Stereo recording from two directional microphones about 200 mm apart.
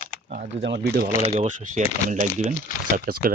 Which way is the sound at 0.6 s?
60° right (ahead or behind).